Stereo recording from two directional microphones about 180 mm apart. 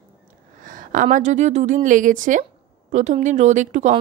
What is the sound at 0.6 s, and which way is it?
A woman's voice, 50° right (ahead or behind).